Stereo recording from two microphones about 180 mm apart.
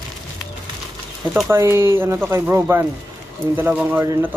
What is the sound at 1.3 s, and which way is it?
Speech, 10° right (ahead or behind).